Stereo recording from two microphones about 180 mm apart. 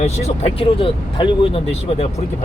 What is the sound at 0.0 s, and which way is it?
Speech, 35° left (ahead or behind).